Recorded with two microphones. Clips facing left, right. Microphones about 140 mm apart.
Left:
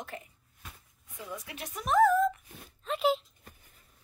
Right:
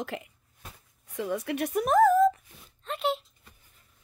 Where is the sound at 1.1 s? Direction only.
75° right (ahead or behind); by 2.4 s 40° right (ahead or behind).